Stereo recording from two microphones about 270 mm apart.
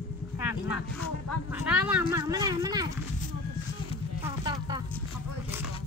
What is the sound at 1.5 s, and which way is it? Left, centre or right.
Speech, centre.